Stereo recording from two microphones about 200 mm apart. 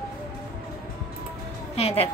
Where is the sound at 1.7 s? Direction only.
30° left (ahead or behind).